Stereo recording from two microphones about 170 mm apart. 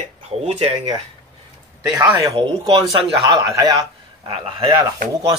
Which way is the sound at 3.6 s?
25° right (ahead or behind).